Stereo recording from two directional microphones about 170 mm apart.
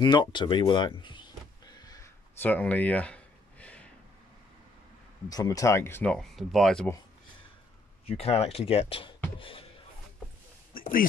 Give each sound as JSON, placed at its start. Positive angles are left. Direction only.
{"t": 0.0, "sound": "speech", "side_deg": 25}
{"t": 2.4, "sound": "a sound", "side_deg": 10}
{"t": 5.3, "sound": "speech", "side_deg": 20}
{"t": 8.1, "sound": "speech", "side_deg": 35}